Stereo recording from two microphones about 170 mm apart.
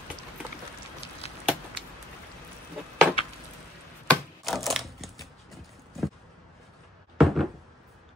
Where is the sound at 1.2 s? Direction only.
40° left (ahead or behind).